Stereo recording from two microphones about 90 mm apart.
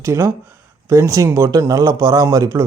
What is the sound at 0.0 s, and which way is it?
Speech, 35° right (ahead or behind).